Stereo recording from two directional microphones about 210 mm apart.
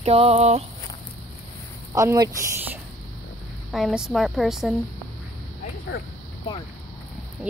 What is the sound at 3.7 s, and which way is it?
A woman's voice, centre (ahead or behind).